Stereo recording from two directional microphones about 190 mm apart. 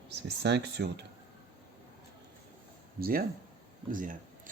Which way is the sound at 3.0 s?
50° right (ahead or behind).